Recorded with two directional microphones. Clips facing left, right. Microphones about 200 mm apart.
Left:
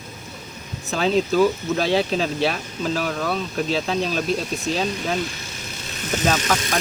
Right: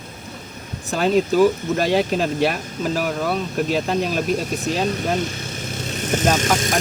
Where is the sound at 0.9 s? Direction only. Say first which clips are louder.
Right 2 dB; 10° right (ahead or behind).